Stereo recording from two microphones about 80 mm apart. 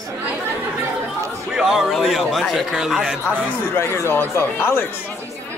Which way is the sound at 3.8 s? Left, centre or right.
Left.